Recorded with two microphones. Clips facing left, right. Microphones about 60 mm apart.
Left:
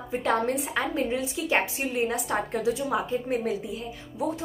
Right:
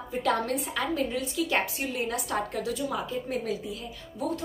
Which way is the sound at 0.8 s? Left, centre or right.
Left.